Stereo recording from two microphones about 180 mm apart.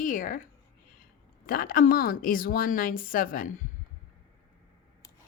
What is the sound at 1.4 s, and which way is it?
A woman's voice, 55° left (ahead or behind).